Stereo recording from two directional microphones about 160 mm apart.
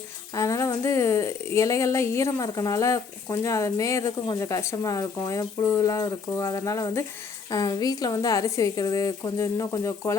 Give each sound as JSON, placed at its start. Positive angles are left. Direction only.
{"t": 0.3, "sound": "speech", "side_deg": 20}